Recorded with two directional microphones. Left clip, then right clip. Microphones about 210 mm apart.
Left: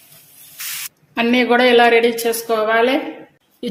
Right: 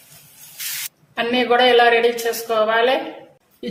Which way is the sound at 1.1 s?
35° left (ahead or behind).